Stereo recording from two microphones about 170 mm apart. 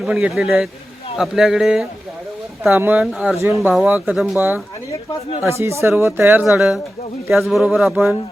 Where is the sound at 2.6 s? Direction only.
10° right (ahead or behind).